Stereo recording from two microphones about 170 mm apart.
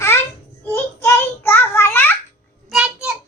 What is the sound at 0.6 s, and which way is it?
Child singing, 15° left (ahead or behind).